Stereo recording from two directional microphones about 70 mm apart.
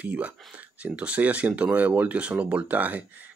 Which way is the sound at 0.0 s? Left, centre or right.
Right.